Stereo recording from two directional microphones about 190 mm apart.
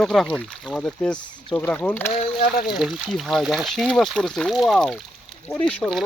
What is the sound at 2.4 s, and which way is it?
Speech, 55° left (ahead or behind).